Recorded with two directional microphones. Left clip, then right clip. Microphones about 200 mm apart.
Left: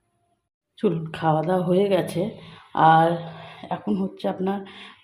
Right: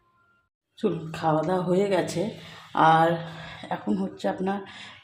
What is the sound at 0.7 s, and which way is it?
Speech, 10° left (ahead or behind).